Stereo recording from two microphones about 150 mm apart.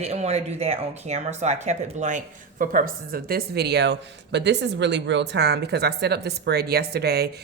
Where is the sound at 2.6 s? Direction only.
65° right (ahead or behind); by 3.9 s 90° right.